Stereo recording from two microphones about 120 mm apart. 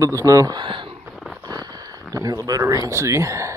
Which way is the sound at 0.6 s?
45° right (ahead or behind).